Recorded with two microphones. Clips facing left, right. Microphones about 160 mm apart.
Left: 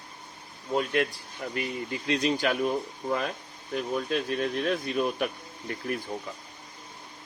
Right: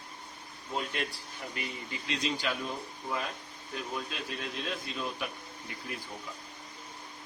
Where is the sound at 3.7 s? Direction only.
55° left (ahead or behind).